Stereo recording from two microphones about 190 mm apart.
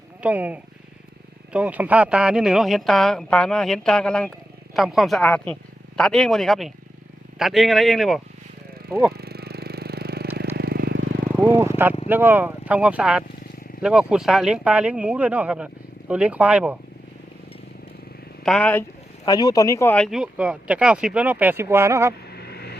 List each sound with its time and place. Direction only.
0.2 s speech: 10° right (ahead or behind)
9.1 s a sound: 55° right (ahead or behind)
10.5 s vehicle: 55° right (ahead or behind)
11.3 s vehicle: 10° right (ahead or behind)
12.0 s speech: 10° right (ahead or behind)
18.4 s speech: 5° left (ahead or behind)
19.2 s speech: 20° left (ahead or behind)
20.1 s speech: 5° right (ahead or behind)
22.3 s a sound: 60° left (ahead or behind)